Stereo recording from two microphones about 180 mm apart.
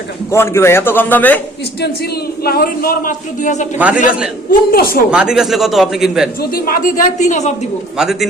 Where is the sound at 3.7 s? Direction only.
10° right (ahead or behind).